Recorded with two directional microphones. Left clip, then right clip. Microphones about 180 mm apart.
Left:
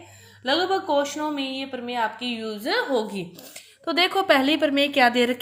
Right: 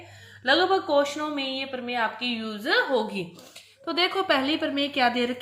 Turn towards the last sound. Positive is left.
turn(degrees=50)  # may be behind; listen again after turning